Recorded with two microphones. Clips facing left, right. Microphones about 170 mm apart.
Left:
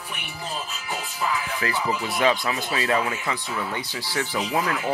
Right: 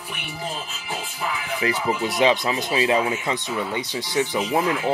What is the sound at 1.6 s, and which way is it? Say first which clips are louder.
Speech: right 5 dB; 20° right (ahead or behind).